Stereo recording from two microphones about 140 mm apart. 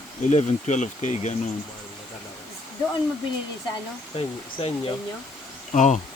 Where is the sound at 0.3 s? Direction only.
60° left (ahead or behind).